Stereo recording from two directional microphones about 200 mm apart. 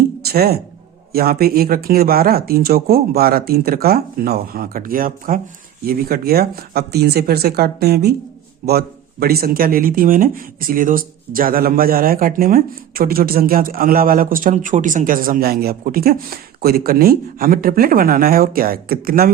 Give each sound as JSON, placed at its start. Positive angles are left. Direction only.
{"t": 0.2, "sound": "speech", "side_deg": -50}
{"t": 9.2, "sound": "speech", "side_deg": -50}